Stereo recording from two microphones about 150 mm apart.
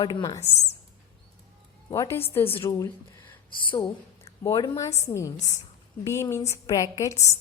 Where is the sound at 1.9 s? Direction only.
20° left (ahead or behind).